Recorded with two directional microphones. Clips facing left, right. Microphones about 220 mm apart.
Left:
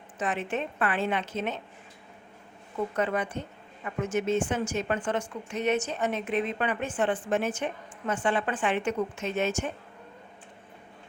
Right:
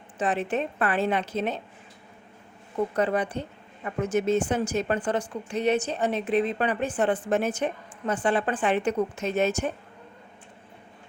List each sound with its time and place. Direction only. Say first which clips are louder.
0.2 s a woman's voice: right 4 dB; 35° right (ahead or behind)
2.9 s a woman's voice: right 3 dB; 35° right (ahead or behind)